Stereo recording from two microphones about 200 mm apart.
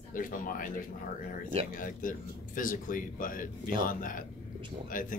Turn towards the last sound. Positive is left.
turn(degrees=40)  # may be behind; listen again after turning